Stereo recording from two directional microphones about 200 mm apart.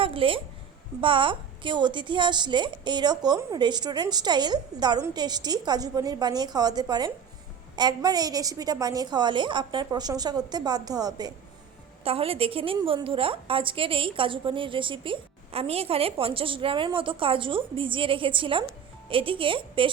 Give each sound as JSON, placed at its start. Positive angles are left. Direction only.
{"t": 0.0, "sound": "a woman's voice", "side_deg": -25}